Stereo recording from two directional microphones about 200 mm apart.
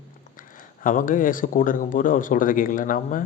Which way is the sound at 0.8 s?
40° left (ahead or behind).